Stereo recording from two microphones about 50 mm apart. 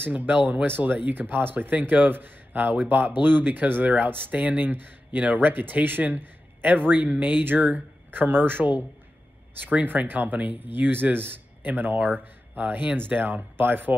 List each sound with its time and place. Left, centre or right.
0.0 s speech: right